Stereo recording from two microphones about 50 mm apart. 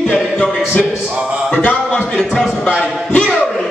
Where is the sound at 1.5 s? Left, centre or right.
Left.